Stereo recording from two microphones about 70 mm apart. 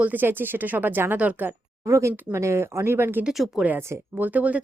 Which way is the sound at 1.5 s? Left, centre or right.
Right.